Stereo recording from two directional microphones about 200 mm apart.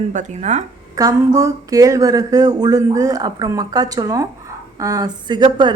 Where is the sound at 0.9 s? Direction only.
15° right (ahead or behind).